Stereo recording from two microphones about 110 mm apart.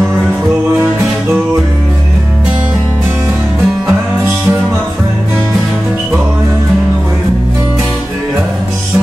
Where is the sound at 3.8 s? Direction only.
25° right (ahead or behind).